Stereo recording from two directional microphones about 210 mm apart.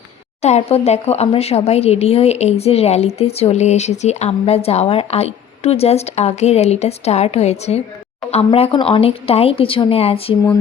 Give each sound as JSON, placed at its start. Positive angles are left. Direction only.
{"t": 0.4, "sound": "speech", "side_deg": 30}